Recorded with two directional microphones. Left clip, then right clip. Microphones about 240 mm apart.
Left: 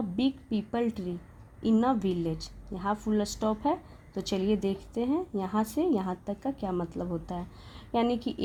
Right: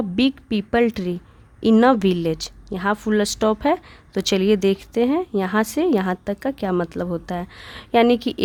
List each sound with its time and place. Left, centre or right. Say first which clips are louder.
0.2 s a woman's voice: right 9 dB; right